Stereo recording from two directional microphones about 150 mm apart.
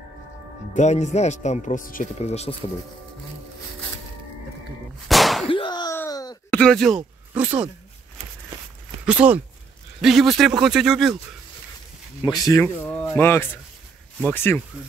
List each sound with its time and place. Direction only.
0.7 s speech: 50° left (ahead or behind)
2.2 s speech: 45° left (ahead or behind)
5.0 s whip: centre (ahead or behind)
5.5 s slap: 30° left (ahead or behind)
5.9 s wail: 25° left (ahead or behind)
6.5 s speech: 5° left (ahead or behind)
7.0 s speech: 10° right (ahead or behind)
9.0 s speech: 10° right (ahead or behind)
12.3 s speech: 25° left (ahead or behind)